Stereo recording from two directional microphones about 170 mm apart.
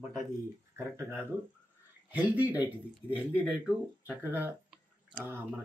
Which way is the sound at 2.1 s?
10° right (ahead or behind).